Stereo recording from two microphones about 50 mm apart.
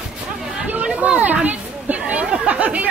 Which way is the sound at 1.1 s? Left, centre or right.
Right.